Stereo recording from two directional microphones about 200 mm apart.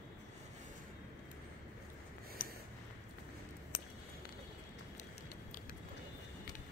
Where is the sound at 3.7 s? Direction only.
50° left (ahead or behind).